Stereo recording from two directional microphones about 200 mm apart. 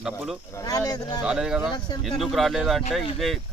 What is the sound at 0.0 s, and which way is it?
Speech, centre (ahead or behind).